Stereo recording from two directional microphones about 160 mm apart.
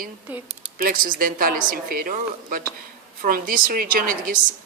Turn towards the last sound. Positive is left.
turn(degrees=-60)  # may be behind; listen again after turning